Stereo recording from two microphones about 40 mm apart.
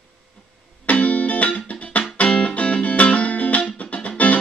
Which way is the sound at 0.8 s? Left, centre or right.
Left.